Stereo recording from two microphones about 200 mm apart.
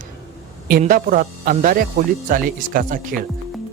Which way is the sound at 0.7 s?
45° right (ahead or behind).